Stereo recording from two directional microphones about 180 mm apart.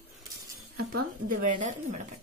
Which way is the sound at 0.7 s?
55° right (ahead or behind).